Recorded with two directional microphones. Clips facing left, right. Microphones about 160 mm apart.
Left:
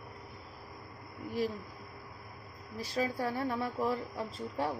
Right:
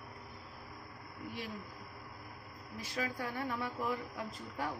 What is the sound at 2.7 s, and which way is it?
Speech, 35° left (ahead or behind).